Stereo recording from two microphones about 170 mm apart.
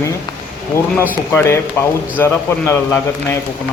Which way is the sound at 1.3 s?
15° left (ahead or behind).